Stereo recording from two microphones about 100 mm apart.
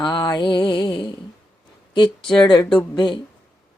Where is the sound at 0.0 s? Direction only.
45° left (ahead or behind).